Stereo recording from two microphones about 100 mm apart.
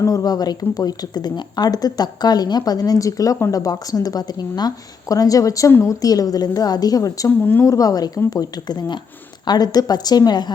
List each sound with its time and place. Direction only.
0.0 s speech: 35° left (ahead or behind)
7.3 s speech: 20° left (ahead or behind)
7.6 s speech: 35° left (ahead or behind)